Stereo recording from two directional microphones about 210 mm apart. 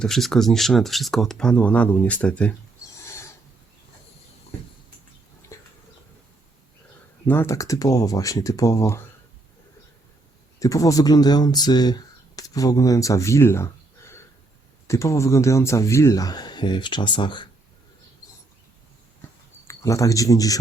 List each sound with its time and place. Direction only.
0.0 s speech: centre (ahead or behind)
3.0 s a sound: 15° left (ahead or behind)
5.5 s bee: 15° left (ahead or behind)
7.3 s speech: 10° left (ahead or behind)
10.6 s speech: 15° left (ahead or behind)
19.2 s a sound: 10° left (ahead or behind)
19.6 s speech: 15° left (ahead or behind)